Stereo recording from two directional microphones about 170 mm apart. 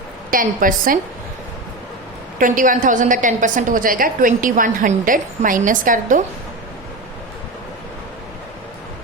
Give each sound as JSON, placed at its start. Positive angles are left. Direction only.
{"t": 0.3, "sound": "a woman's voice", "side_deg": -55}
{"t": 2.4, "sound": "a woman's voice", "side_deg": -50}